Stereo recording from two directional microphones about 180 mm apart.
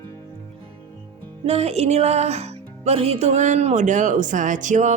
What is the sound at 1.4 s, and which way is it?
Speech, 35° right (ahead or behind).